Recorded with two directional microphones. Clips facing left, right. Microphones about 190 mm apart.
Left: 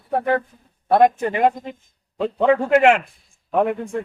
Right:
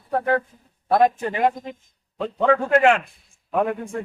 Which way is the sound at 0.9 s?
20° left (ahead or behind).